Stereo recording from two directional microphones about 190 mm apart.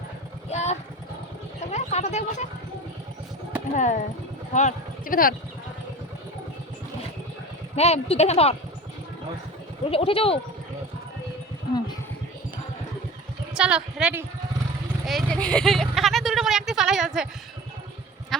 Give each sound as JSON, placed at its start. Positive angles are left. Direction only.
{"t": 0.5, "sound": "vehicle", "side_deg": 35}
{"t": 1.7, "sound": "speech", "side_deg": 35}
{"t": 3.8, "sound": "speech", "side_deg": 40}
{"t": 7.8, "sound": "speech", "side_deg": 35}
{"t": 9.9, "sound": "speech", "side_deg": 30}
{"t": 13.5, "sound": "a woman's voice", "side_deg": -5}
{"t": 15.0, "sound": "a sound", "side_deg": 0}